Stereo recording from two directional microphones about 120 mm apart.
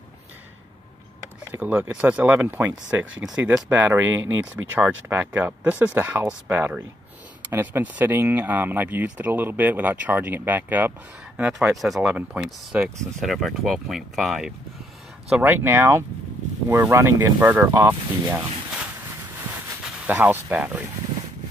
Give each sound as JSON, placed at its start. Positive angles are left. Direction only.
{"t": 1.5, "sound": "speech", "side_deg": -10}
{"t": 11.5, "sound": "speech", "side_deg": 0}
{"t": 15.2, "sound": "speech", "side_deg": -15}
{"t": 20.1, "sound": "speech", "side_deg": -15}